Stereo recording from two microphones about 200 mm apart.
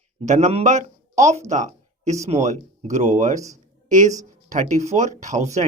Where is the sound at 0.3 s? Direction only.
35° right (ahead or behind).